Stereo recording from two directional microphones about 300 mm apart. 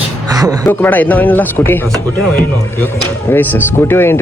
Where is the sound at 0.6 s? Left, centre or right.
Centre.